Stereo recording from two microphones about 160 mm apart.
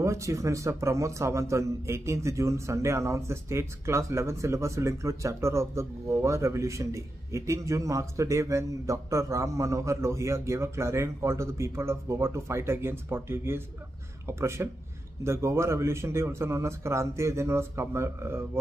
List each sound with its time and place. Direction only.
0.0 s a man's voice: 20° right (ahead or behind)